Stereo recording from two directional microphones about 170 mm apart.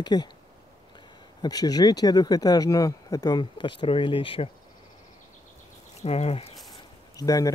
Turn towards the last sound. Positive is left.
turn(degrees=20)  # may be behind; listen again after turning